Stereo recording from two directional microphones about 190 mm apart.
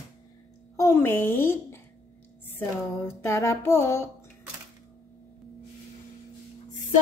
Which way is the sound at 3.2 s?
15° left (ahead or behind).